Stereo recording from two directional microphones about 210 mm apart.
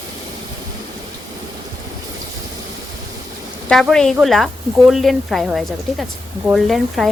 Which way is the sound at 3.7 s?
Centre (ahead or behind).